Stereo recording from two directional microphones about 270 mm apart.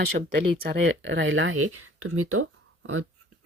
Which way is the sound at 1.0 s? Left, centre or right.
Right.